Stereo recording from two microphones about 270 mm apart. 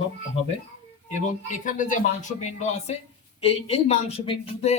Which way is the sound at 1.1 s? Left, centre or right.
Left.